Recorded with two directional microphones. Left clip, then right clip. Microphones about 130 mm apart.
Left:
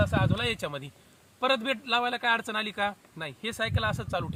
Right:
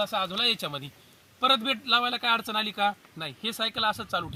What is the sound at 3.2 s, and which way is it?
Speech, 70° left (ahead or behind).